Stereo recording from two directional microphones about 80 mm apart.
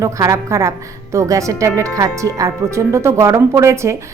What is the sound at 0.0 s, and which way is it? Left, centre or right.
Speech, right.